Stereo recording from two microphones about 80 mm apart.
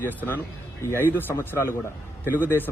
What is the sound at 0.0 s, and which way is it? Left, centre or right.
A man's voice, left.